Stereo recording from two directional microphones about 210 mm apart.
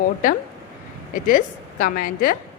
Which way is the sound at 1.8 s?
40° left (ahead or behind).